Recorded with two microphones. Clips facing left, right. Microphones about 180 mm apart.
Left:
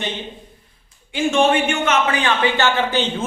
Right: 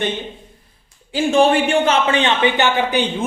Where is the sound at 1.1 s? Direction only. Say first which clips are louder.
Right 2 dB; 35° right (ahead or behind).